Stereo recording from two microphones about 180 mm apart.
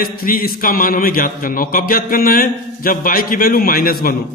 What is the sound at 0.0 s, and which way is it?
A man's voice, 55° left (ahead or behind).